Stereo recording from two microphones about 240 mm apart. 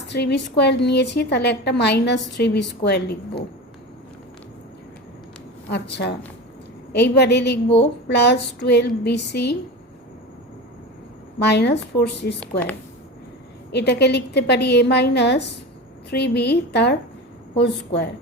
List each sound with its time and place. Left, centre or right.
0.1 s a woman's voice: left
5.7 s a woman's voice: left
11.3 s a woman's voice: left
13.7 s a woman's voice: left